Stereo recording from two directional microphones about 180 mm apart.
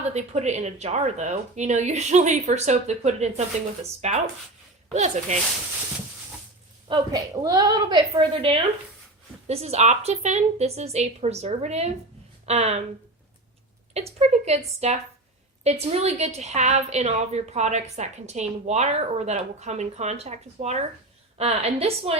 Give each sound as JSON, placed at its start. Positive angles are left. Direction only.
{"t": 0.0, "sound": "a woman's voice", "side_deg": -40}
{"t": 6.8, "sound": "a woman's voice", "side_deg": -25}
{"t": 14.2, "sound": "a woman's voice", "side_deg": -35}